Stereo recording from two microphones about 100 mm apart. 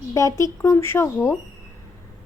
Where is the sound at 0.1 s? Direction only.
35° left (ahead or behind).